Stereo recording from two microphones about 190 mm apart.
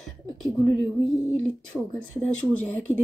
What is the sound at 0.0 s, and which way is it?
Speech, centre (ahead or behind).